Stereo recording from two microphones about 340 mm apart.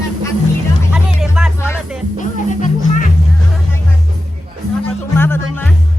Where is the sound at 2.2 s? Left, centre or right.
Left.